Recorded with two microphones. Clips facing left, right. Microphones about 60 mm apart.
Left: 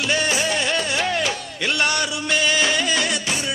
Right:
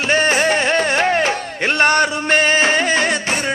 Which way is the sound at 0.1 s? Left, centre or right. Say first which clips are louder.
Right 8 dB; right.